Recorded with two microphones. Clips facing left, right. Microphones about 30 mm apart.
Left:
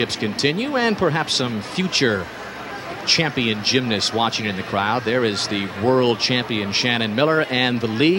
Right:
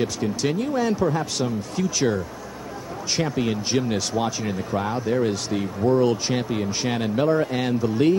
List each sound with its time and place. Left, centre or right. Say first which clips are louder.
0.0 s speech: left 3 dB; left